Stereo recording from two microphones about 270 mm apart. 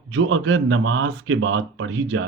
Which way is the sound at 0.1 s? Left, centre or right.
Right.